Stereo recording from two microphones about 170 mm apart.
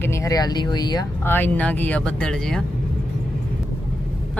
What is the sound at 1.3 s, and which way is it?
Speech, 10° left (ahead or behind).